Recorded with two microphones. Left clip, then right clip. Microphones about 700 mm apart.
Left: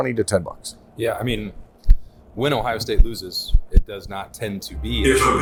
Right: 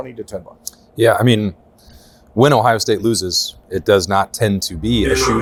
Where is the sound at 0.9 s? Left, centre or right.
Right.